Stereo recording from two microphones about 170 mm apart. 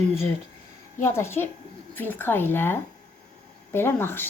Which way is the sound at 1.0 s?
15° left (ahead or behind).